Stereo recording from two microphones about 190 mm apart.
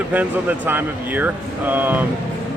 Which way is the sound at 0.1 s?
10° right (ahead or behind).